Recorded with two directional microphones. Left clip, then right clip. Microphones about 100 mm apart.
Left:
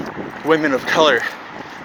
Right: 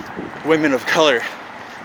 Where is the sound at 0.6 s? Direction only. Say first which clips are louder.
Right 1 dB; 55° right (ahead or behind).